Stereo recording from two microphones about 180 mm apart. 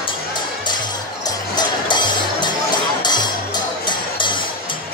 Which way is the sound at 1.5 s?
25° left (ahead or behind).